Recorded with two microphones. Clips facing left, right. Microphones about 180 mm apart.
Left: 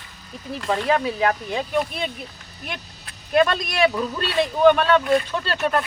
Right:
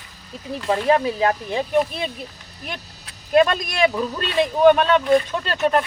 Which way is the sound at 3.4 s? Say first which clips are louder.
Right 2 dB; 20° right (ahead or behind).